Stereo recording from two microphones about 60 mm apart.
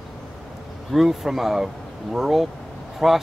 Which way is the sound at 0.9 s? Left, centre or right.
Centre.